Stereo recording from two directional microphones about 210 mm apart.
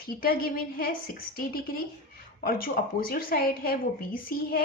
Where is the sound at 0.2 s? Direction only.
45° left (ahead or behind).